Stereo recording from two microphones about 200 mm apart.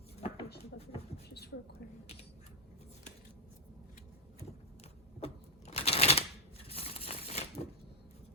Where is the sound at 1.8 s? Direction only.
55° left (ahead or behind).